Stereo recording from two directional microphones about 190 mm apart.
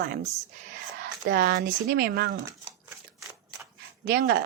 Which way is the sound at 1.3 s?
50° right (ahead or behind).